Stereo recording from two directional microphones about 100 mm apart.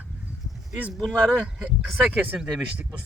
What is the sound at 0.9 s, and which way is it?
Speech, 5° left (ahead or behind).